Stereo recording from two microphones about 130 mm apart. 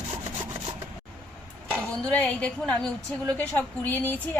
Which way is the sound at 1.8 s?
10° left (ahead or behind).